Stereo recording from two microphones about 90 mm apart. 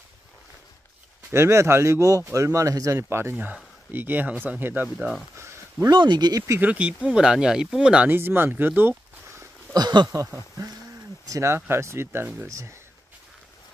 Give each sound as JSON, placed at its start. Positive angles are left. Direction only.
{"t": 1.3, "sound": "speech", "side_deg": -30}
{"t": 5.4, "sound": "a sound", "side_deg": -30}
{"t": 5.9, "sound": "speech", "side_deg": -55}
{"t": 6.6, "sound": "speech", "side_deg": -15}
{"t": 8.1, "sound": "speech", "side_deg": -25}
{"t": 9.8, "sound": "speech", "side_deg": -50}
{"t": 11.2, "sound": "speech", "side_deg": -35}